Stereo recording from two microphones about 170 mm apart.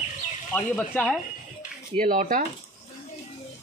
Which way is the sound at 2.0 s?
50° right (ahead or behind).